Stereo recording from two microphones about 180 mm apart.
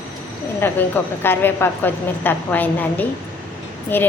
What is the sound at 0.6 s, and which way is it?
Speech, 10° left (ahead or behind).